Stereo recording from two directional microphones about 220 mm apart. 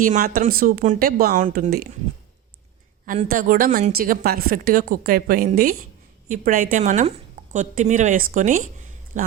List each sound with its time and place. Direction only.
0.0 s a woman's voice: 40° right (ahead or behind)
3.1 s a woman's voice: 35° right (ahead or behind)